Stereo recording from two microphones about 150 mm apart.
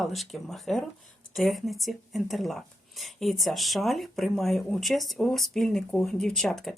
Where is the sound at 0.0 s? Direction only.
Centre (ahead or behind).